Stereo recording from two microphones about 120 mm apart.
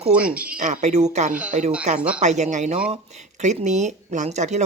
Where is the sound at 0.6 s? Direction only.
80° right.